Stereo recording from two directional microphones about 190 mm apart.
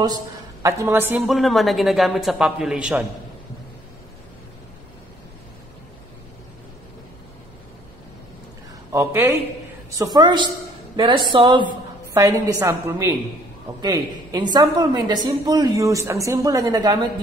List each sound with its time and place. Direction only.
0.0 s a woman's voice: 20° right (ahead or behind)
8.9 s a woman's voice: 15° right (ahead or behind)
10.1 s a woman's voice: 25° right (ahead or behind)